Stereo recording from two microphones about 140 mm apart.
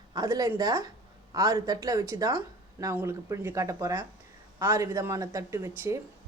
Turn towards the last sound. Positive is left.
turn(degrees=-20)  # may be behind; listen again after turning